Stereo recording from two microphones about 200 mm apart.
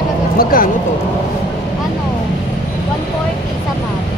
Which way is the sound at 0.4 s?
45° left (ahead or behind).